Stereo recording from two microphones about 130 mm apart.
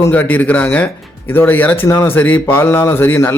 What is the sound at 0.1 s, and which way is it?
A man's voice, 15° left (ahead or behind).